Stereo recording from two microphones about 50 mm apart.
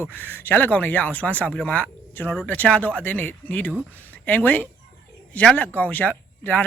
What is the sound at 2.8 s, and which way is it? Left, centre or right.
Speech, left.